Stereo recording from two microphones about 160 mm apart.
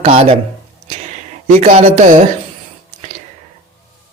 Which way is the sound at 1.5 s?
45° right (ahead or behind).